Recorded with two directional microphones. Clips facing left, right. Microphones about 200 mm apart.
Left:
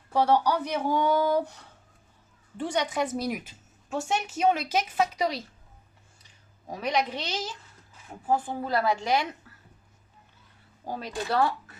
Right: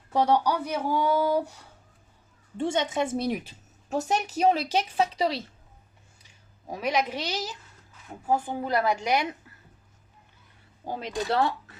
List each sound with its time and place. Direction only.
0.1 s a woman's voice: 15° right (ahead or behind)
2.6 s a woman's voice: 25° right (ahead or behind)
6.7 s a woman's voice: 10° right (ahead or behind)
10.8 s speech: 20° right (ahead or behind)